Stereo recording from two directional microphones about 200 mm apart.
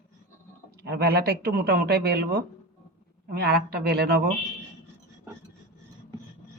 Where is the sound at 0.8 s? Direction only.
55° right (ahead or behind).